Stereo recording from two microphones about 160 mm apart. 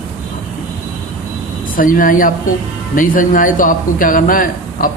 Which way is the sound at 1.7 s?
60° left (ahead or behind).